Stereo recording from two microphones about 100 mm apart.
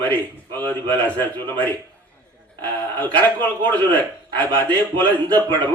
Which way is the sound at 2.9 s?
15° left (ahead or behind).